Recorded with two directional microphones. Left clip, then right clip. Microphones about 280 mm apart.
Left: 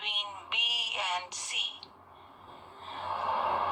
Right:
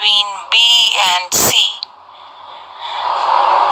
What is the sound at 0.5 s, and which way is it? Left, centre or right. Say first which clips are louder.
Synthetic singing: right 19 dB; right.